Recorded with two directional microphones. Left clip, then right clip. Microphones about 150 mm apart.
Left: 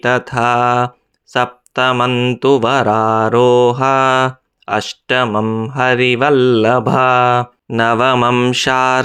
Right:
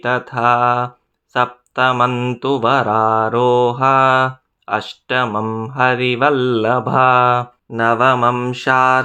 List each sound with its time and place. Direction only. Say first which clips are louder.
0.0 s mantra: left 2 dB; 30° left (ahead or behind)
1.3 s speech: left 1 dB; 30° left (ahead or behind)
2.0 s mantra: left 4 dB; 20° left (ahead or behind)
2.4 s mantra: left 2 dB; 30° left (ahead or behind)
5.4 s mantra: left 3 dB; 20° left (ahead or behind)
5.7 s mantra: left 2 dB; 30° left (ahead or behind)
7.8 s mantra: left 1 dB; 45° left (ahead or behind)